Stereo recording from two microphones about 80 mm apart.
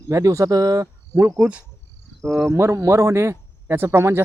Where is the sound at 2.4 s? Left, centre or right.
Right.